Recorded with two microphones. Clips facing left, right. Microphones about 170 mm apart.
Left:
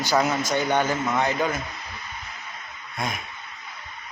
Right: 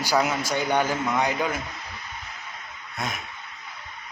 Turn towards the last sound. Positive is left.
turn(degrees=0)  # may be behind; listen again after turning